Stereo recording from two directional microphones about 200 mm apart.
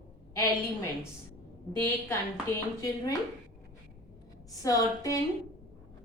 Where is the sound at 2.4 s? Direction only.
15° left (ahead or behind).